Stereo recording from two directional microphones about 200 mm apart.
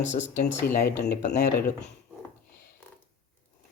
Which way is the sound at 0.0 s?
35° left (ahead or behind).